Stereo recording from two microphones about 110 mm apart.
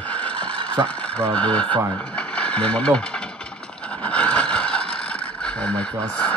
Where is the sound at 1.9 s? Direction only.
10° left (ahead or behind).